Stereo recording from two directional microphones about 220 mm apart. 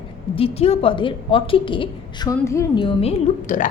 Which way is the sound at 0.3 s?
25° left (ahead or behind).